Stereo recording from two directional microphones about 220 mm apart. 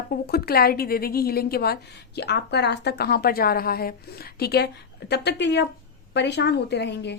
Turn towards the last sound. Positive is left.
turn(degrees=50)  # may be behind; listen again after turning